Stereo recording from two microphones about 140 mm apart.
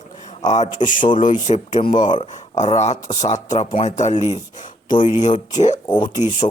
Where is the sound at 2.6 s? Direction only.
55° left (ahead or behind).